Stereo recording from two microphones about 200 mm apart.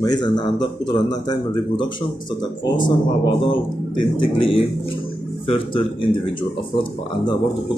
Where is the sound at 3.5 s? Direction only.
25° left (ahead or behind).